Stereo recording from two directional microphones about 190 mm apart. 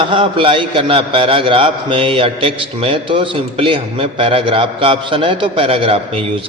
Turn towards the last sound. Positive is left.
turn(degrees=-30)  # may be behind; listen again after turning